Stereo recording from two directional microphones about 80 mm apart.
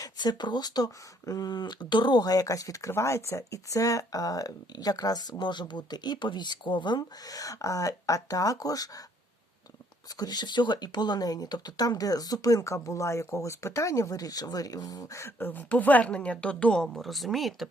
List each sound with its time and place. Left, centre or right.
0.0 s speech: left
1.5 s speech: left
10.1 s speech: left; by 17.7 s centre